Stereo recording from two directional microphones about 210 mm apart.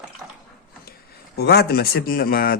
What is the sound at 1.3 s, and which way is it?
A man's voice, 50° left (ahead or behind).